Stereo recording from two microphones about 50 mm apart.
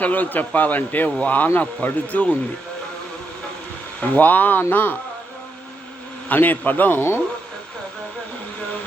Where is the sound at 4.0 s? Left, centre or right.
Left.